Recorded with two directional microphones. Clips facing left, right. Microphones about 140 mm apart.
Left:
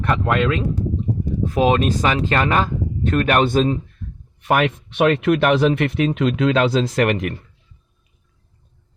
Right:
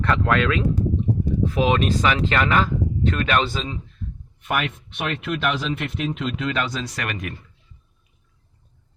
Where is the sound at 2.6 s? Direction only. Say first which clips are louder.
Even; 45° left (ahead or behind).